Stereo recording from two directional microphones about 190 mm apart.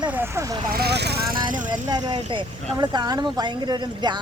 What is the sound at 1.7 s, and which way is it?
Speech, 20° right (ahead or behind).